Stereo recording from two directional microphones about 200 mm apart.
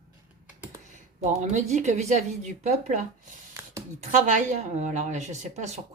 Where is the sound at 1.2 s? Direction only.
35° right (ahead or behind).